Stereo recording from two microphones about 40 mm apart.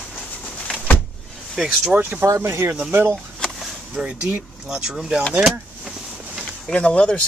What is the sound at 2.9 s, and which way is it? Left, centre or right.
Speech, right.